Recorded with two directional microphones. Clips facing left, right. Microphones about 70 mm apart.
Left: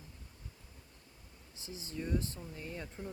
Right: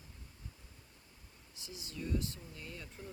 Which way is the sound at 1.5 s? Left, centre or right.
Left.